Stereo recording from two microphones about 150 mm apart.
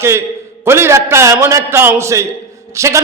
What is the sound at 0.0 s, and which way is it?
A man's voice, 15° right (ahead or behind).